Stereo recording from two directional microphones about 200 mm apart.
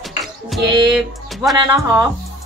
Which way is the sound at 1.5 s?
15° right (ahead or behind).